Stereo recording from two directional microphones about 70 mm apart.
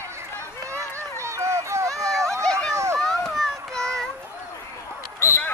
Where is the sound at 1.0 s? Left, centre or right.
Right.